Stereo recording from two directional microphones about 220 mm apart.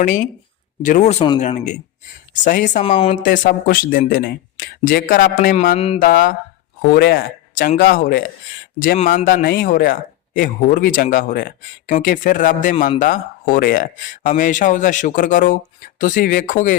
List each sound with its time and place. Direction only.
0.8 s a man's voice: 35° left (ahead or behind)
3.2 s a man's voice: 40° left (ahead or behind)
6.0 s a man's voice: 40° left (ahead or behind)